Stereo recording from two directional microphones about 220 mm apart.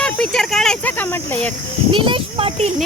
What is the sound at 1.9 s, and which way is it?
Speech, 20° right (ahead or behind).